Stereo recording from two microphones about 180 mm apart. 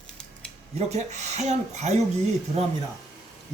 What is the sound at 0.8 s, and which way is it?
Speech, 40° right (ahead or behind).